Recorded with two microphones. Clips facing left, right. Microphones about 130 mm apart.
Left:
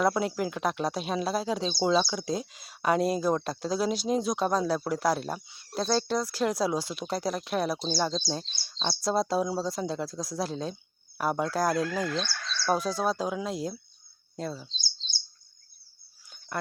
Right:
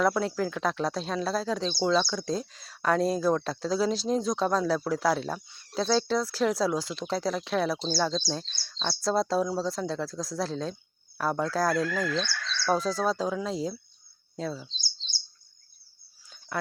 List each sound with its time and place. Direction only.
0.0 s speech: 10° left (ahead or behind)
12.3 s fowl: 40° left (ahead or behind)
12.6 s speech: 5° left (ahead or behind)